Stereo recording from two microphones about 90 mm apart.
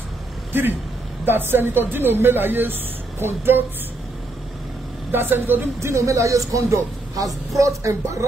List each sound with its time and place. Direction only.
0.5 s speech: 20° right (ahead or behind)
5.1 s a man's voice: 25° right (ahead or behind)